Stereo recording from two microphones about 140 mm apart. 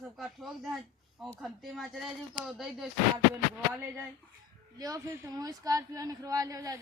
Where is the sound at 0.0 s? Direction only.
Centre (ahead or behind).